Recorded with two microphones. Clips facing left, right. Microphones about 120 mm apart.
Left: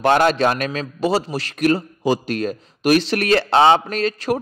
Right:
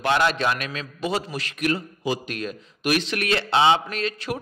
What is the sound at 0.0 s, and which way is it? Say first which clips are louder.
A man's voice: left 6 dB; 45° left (ahead or behind).